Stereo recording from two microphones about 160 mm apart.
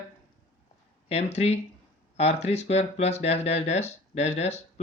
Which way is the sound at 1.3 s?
45° left (ahead or behind).